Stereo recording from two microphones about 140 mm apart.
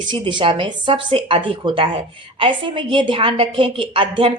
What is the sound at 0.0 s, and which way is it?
Speech, 35° right (ahead or behind).